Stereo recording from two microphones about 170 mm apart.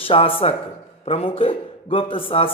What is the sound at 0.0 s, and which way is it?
A man's voice, 35° left (ahead or behind).